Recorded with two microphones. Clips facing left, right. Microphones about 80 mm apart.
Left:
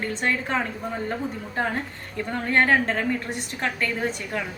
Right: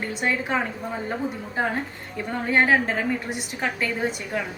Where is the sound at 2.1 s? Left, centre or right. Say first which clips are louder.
Even; centre.